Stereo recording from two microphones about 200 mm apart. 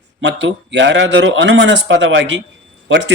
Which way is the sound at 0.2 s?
65° right (ahead or behind).